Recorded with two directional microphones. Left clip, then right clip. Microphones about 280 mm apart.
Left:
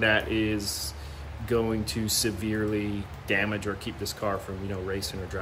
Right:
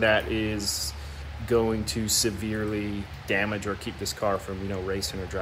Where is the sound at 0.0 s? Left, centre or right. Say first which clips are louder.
Right 1 dB; centre.